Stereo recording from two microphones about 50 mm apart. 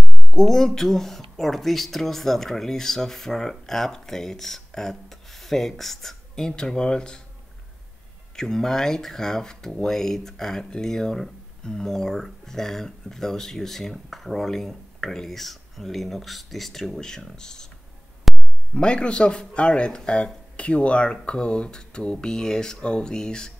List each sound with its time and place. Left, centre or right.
0.3 s speech: centre
8.4 s speech: centre
18.3 s a sound: centre
18.8 s speech: left